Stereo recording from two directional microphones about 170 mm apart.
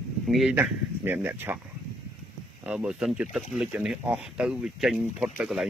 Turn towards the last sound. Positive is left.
turn(degrees=-5)  # may be behind; listen again after turning